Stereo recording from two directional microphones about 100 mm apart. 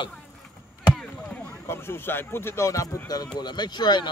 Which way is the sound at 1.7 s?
25° left (ahead or behind).